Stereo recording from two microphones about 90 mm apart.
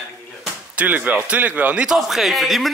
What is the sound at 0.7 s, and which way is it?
Speech, 15° right (ahead or behind).